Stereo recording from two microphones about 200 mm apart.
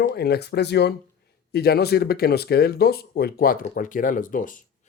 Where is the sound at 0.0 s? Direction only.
50° left (ahead or behind).